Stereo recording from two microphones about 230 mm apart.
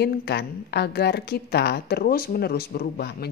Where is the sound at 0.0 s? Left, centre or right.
Left.